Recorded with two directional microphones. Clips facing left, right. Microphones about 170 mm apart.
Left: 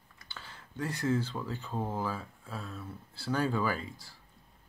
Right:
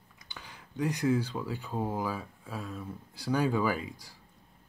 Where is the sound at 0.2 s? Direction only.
15° right (ahead or behind).